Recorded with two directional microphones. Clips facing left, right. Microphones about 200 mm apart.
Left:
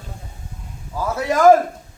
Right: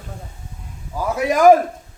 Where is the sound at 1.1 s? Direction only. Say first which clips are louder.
Right 1 dB; 15° right (ahead or behind).